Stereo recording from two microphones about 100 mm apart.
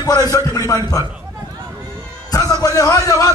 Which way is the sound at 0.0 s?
40° left (ahead or behind).